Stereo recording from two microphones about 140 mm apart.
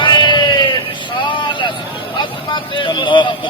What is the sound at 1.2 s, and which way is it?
Vehicle, 35° left (ahead or behind).